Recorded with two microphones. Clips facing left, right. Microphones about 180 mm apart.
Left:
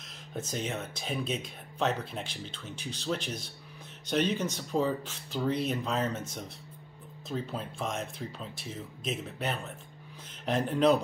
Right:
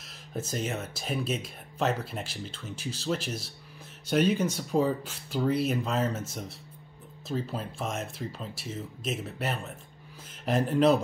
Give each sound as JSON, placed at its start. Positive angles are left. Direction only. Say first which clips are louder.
{"t": 0.3, "sound": "speech", "louder": "right 2 dB", "side_deg": -5}